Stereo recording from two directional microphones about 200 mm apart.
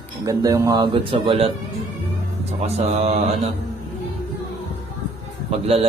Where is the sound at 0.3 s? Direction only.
15° right (ahead or behind).